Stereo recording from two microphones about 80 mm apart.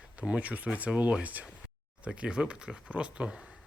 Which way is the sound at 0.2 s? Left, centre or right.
Centre.